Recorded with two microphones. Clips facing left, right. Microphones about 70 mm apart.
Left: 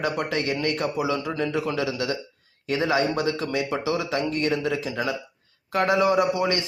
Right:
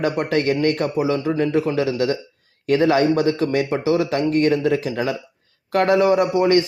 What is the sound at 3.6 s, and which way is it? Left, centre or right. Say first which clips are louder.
Speech: right 6 dB; right.